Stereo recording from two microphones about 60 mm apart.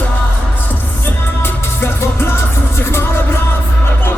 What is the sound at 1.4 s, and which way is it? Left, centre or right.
Music, left.